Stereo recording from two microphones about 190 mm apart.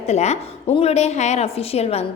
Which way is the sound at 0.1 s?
35° left (ahead or behind).